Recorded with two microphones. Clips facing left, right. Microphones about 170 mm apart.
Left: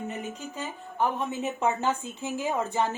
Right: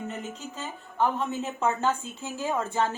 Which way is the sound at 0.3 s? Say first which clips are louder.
Left 1 dB; 15° left (ahead or behind).